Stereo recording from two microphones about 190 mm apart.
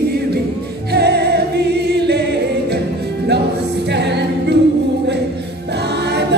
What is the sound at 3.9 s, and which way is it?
Music, 65° right (ahead or behind).